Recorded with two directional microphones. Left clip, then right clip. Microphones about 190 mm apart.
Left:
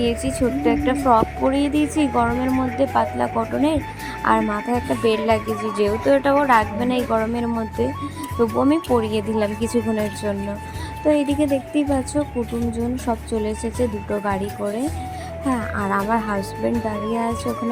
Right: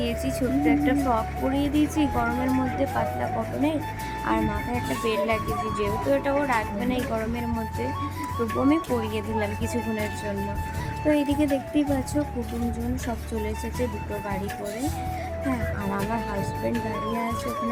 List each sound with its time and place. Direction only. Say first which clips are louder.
0.0 s speech: left 6 dB; 15° left (ahead or behind)
9.7 s speech: left 9 dB; centre (ahead or behind)
11.1 s speech: left 4 dB; 15° left (ahead or behind)
15.4 s speech: left 8 dB; 25° left (ahead or behind)